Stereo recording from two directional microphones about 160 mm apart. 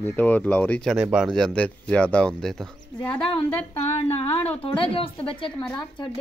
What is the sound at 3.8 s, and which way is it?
A woman's voice, 40° left (ahead or behind).